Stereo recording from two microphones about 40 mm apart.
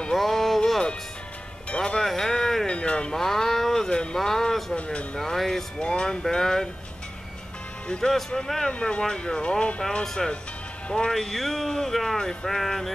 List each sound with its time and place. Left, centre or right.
0.1 s music: centre
2.0 s a sound: centre
2.7 s music: left
3.1 s a sound: centre
3.9 s a sound: left
4.2 s a sound: centre
4.8 s speech: left
5.2 s speech: centre
5.8 s speech: left
6.2 s speech: centre
8.0 s speech: centre
8.7 s speech: left; by 12.9 s centre